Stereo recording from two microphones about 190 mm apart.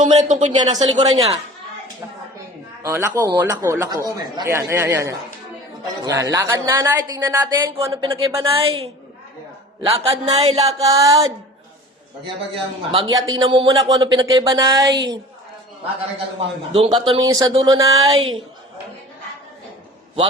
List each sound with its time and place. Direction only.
0.2 s speech: 40° right (ahead or behind)
2.8 s speech: 15° right (ahead or behind)
8.5 s a man's voice: 30° right (ahead or behind)
10.8 s a man's voice: 20° right (ahead or behind)
12.2 s a man's voice: 30° right (ahead or behind)
16.7 s a man's voice: 30° right (ahead or behind)